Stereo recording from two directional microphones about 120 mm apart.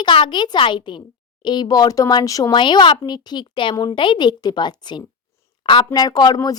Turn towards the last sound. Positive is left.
turn(degrees=35)  # may be behind; listen again after turning